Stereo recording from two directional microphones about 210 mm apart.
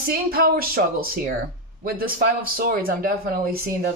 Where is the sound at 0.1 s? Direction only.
45° right (ahead or behind).